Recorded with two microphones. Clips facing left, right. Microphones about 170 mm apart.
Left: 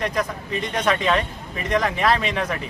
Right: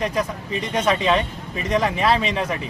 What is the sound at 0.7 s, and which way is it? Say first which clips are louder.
Speech: right 2 dB; 10° right (ahead or behind).